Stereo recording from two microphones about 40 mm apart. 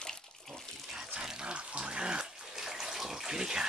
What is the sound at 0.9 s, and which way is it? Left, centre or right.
Speech, centre.